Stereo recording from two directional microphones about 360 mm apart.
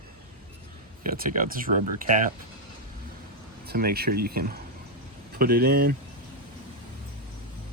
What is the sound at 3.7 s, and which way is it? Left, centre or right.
Speech, right.